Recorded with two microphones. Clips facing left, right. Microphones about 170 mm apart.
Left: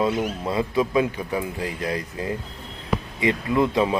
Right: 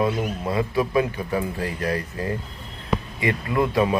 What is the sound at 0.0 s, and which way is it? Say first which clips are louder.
Speech: even; 20° left (ahead or behind).